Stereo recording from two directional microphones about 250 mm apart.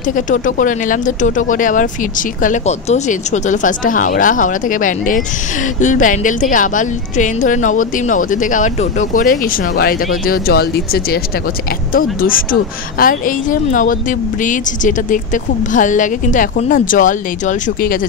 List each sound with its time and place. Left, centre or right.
0.1 s speech: left